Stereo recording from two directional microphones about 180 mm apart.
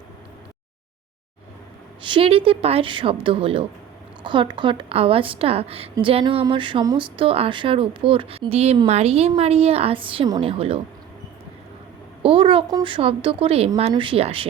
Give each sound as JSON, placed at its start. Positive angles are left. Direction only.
{"t": 2.0, "sound": "a woman's voice", "side_deg": -25}
{"t": 12.2, "sound": "a woman's voice", "side_deg": -30}